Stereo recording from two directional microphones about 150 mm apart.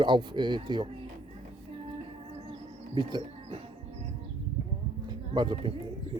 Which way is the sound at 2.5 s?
30° right (ahead or behind).